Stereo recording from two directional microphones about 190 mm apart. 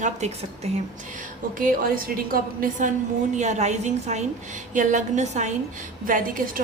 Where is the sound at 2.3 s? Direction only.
45° right (ahead or behind).